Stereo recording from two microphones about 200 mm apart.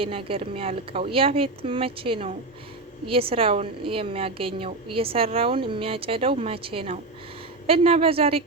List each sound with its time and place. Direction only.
0.0 s a woman's voice: 25° right (ahead or behind)